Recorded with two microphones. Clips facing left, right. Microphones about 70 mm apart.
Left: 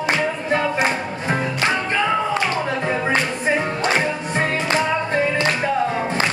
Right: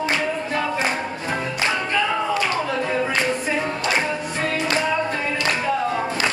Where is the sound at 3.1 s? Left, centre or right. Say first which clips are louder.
Left 2 dB; left.